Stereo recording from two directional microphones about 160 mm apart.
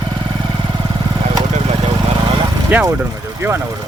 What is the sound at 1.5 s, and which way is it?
Vehicle, 40° right (ahead or behind).